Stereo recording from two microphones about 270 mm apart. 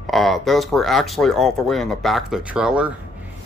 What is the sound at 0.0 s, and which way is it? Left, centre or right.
Speech, centre.